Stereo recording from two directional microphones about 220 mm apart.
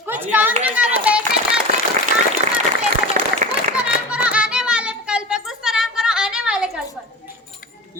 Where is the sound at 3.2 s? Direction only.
35° right (ahead or behind).